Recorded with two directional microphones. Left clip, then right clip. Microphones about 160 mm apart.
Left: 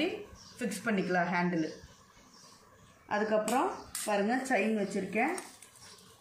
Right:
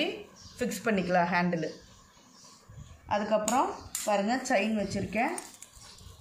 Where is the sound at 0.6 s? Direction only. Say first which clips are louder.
Right 4 dB; 60° right (ahead or behind).